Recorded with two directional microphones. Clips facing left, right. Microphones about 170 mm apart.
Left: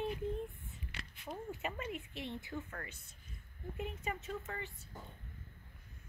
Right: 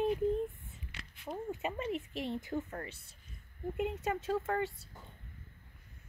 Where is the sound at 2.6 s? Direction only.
30° right (ahead or behind).